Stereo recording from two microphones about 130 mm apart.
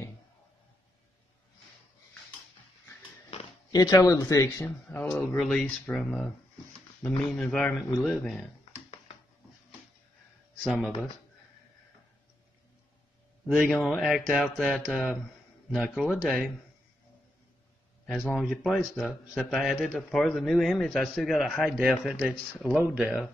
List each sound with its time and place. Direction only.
3.7 s speech: 30° left (ahead or behind)
4.8 s a man's voice: 5° left (ahead or behind)
10.6 s speech: 5° right (ahead or behind)
13.7 s a man's voice: centre (ahead or behind)
18.3 s a man's voice: centre (ahead or behind)